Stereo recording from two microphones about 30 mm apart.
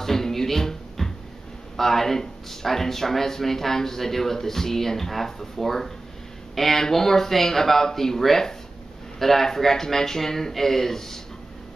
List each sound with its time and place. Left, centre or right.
0.0 s music: centre
1.8 s speech: centre